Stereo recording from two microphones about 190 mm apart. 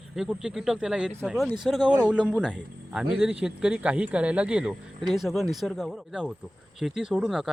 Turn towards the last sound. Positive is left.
turn(degrees=-5)  # may be behind; listen again after turning